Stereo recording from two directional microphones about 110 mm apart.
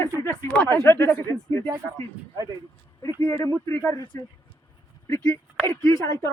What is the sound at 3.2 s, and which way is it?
Speech, 25° left (ahead or behind).